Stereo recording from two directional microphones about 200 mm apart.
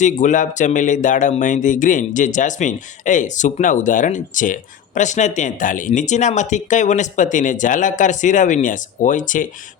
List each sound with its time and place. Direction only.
0.0 s speech: 40° left (ahead or behind)